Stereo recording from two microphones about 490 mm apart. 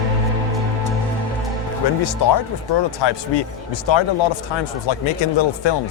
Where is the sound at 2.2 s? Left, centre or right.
Left.